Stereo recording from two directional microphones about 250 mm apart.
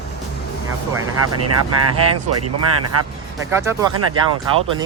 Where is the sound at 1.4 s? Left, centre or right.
Right.